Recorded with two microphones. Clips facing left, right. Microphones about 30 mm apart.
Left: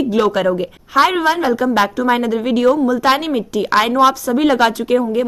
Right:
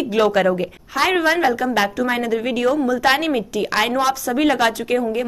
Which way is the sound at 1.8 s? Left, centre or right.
Left.